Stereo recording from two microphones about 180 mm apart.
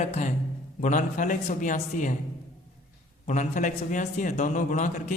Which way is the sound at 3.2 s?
45° left (ahead or behind).